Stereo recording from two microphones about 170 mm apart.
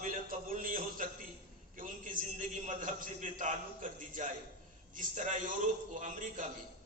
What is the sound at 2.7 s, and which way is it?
A man's voice, 50° right (ahead or behind).